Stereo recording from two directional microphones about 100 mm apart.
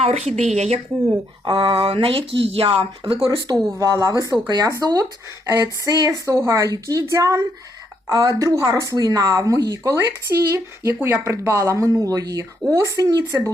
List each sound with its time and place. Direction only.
0.0 s speech: 90° right
1.5 s speech: 60° right (ahead or behind)
3.5 s speech: 35° right (ahead or behind)
13.1 s speech: 40° right (ahead or behind)